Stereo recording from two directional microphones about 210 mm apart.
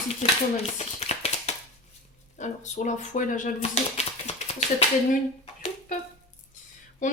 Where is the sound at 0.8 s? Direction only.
30° left (ahead or behind).